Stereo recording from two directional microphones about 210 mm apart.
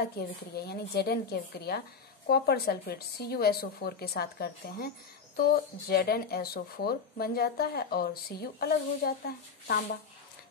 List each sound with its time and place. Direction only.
0.0 s a woman's voice: 50° left (ahead or behind)